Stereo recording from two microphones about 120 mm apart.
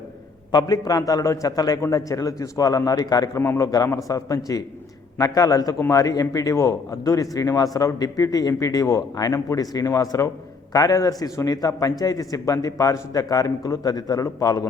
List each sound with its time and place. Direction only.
0.5 s a man's voice: 30° left (ahead or behind)
3.4 s a man's voice: 20° left (ahead or behind)